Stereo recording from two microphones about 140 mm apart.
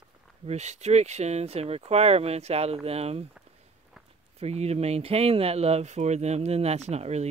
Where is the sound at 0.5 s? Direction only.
55° right (ahead or behind).